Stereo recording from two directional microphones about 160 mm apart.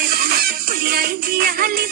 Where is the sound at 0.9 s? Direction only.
70° right (ahead or behind).